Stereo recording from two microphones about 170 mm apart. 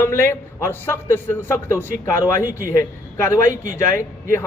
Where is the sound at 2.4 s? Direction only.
15° right (ahead or behind).